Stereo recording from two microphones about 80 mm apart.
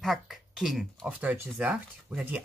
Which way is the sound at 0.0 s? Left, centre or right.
Centre.